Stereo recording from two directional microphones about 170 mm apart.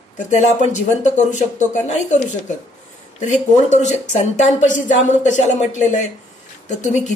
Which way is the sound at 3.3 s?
45° left (ahead or behind).